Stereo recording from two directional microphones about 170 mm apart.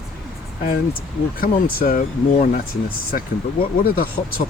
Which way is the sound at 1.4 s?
55° left (ahead or behind).